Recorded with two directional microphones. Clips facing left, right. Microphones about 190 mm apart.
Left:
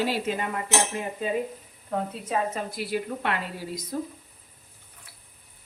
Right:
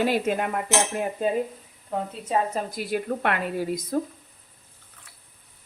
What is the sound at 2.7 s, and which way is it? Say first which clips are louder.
Dishes: right 2 dB; 50° right (ahead or behind).